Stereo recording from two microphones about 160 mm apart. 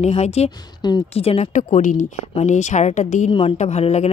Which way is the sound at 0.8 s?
25° left (ahead or behind).